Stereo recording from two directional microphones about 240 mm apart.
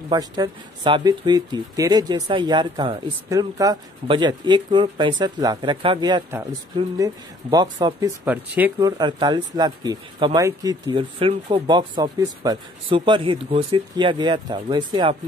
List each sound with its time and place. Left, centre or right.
0.1 s speech: centre